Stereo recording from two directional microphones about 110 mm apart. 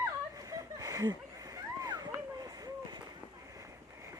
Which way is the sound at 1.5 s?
35° right (ahead or behind).